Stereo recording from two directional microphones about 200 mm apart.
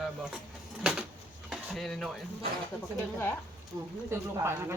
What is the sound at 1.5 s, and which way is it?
Dishes, centre (ahead or behind).